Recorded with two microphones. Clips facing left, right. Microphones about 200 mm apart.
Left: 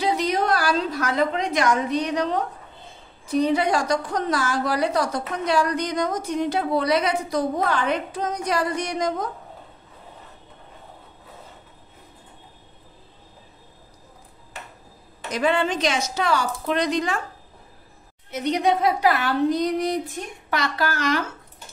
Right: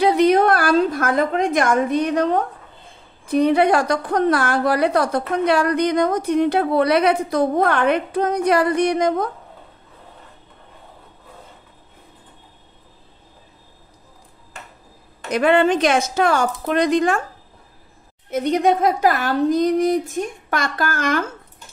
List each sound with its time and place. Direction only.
0.0 s a sound: 60° right (ahead or behind)
3.3 s a woman's voice: 60° right (ahead or behind)
15.3 s a woman's voice: 60° right (ahead or behind)
18.3 s a woman's voice: 50° right (ahead or behind)